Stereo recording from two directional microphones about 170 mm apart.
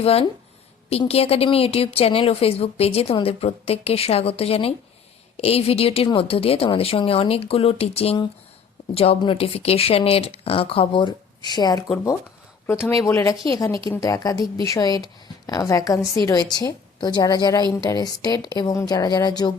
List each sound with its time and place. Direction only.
0.0 s a woman's voice: 35° left (ahead or behind)
13.0 s speech: 20° left (ahead or behind)